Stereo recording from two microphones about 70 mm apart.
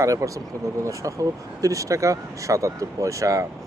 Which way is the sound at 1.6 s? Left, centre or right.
Right.